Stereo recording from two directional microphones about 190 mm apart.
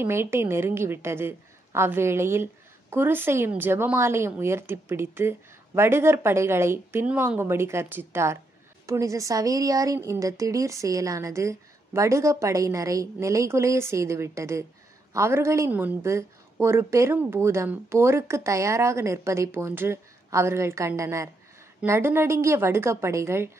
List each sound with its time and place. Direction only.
0.0 s a woman's voice: 15° right (ahead or behind)